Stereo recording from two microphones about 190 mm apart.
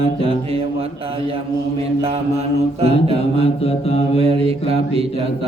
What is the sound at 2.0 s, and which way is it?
Mantra, 30° right (ahead or behind).